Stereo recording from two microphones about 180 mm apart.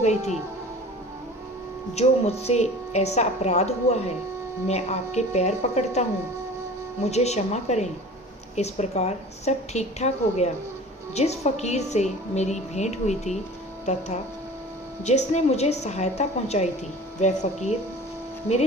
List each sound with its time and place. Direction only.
0.0 s a woman's voice: 40° left (ahead or behind)
2.0 s a woman's voice: 35° left (ahead or behind)
15.0 s a woman's voice: 40° left (ahead or behind)